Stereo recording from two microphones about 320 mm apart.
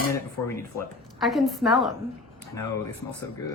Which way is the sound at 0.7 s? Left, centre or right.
Centre.